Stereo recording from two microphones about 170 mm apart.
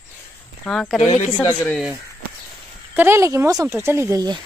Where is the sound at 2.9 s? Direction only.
15° right (ahead or behind).